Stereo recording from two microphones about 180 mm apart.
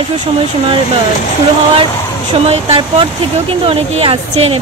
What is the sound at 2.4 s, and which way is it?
Speech, 30° right (ahead or behind).